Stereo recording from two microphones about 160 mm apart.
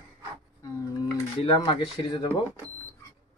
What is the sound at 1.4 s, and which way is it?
Speech, 35° left (ahead or behind).